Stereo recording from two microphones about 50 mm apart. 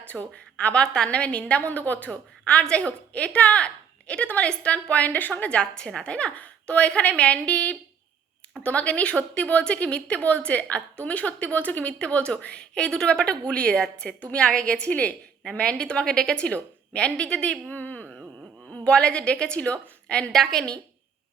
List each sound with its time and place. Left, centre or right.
0.0 s a woman's voice: left
2.0 s a woman's voice: left
17.7 s a sound: left
18.7 s a woman's voice: centre
20.3 s a woman's voice: centre